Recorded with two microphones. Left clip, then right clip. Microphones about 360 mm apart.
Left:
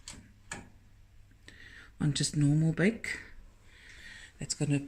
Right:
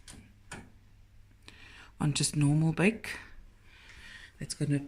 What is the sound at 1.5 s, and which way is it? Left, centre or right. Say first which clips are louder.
Speech: even; centre.